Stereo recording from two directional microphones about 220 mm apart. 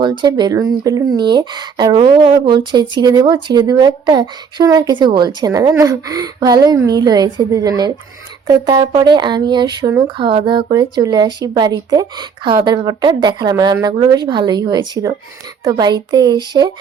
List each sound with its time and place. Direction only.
0.0 s speech: 20° right (ahead or behind)